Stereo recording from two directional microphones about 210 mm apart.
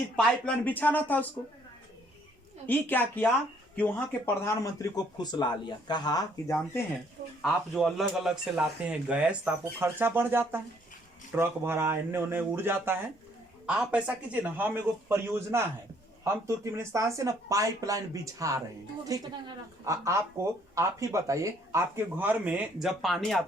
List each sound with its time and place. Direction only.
0.2 s speech: 5° left (ahead or behind)
2.6 s speech: 10° left (ahead or behind)
4.4 s a man's voice: 15° left (ahead or behind)
7.4 s speech: centre (ahead or behind)